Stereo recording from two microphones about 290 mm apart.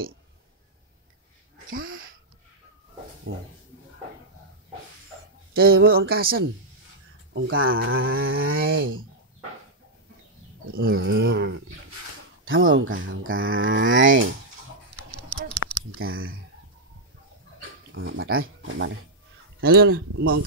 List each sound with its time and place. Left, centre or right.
1.8 s a sound: right
3.3 s speech: right
5.7 s speech: right
6.0 s speech: right
7.3 s speech: right
10.7 s speech: right
15.6 s typing: left
16.1 s speech: right
17.9 s speech: right
19.6 s speech: right